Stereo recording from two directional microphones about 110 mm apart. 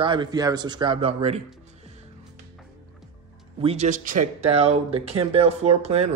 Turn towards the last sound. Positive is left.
turn(degrees=-75)  # may be behind; listen again after turning